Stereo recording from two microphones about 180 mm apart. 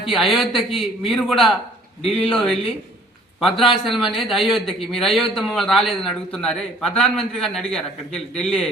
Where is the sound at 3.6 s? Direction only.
Centre (ahead or behind).